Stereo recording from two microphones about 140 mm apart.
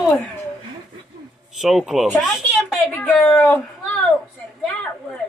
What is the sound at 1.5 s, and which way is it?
Speech, centre (ahead or behind).